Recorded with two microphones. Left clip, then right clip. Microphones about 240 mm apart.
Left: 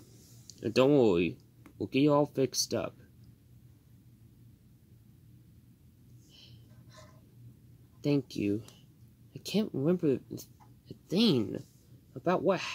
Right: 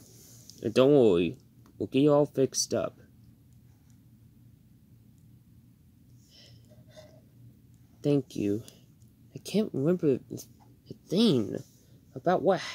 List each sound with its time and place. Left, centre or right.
0.6 s speech: right
8.0 s speech: right